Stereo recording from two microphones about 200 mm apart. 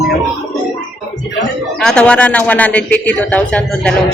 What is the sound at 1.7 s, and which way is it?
A man's voice, 5° left (ahead or behind).